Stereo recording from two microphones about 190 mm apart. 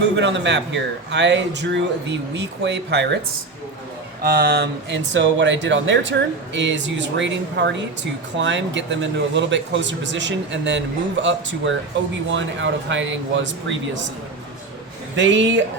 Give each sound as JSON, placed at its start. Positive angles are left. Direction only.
{"t": 0.2, "sound": "a man's voice", "side_deg": -70}
{"t": 4.2, "sound": "a man's voice", "side_deg": -50}
{"t": 15.1, "sound": "a man's voice", "side_deg": -75}